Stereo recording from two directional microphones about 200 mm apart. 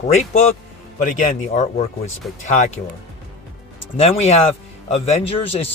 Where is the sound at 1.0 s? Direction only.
40° left (ahead or behind).